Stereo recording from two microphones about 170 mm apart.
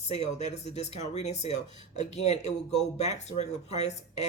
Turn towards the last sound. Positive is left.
turn(degrees=40)  # may be behind; listen again after turning